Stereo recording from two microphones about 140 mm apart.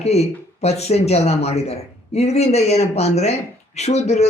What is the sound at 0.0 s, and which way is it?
A man's voice, 50° left (ahead or behind).